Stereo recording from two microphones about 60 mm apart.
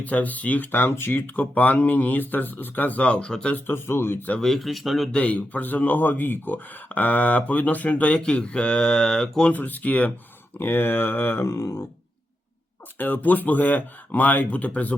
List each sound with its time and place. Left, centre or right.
0.0 s speech: left
3.8 s speech: left
4.4 s speech: centre
5.1 s speech: left
9.5 s speech: left
10.6 s speech: left
11.4 s speech: left
13.0 s speech: left